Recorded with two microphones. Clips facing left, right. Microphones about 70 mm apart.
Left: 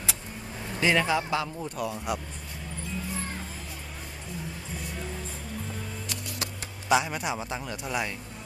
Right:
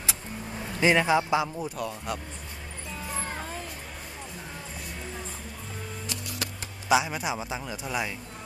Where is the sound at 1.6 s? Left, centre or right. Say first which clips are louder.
Left 1 dB; centre.